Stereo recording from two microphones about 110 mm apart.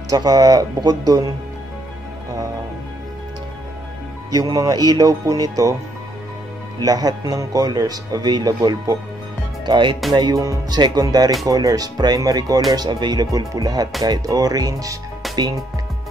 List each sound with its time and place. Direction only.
0.1 s speech: 35° right (ahead or behind)
4.3 s speech: 35° right (ahead or behind)
6.8 s speech: 35° right (ahead or behind)
9.7 s speech: 45° right (ahead or behind)
15.2 s music: centre (ahead or behind)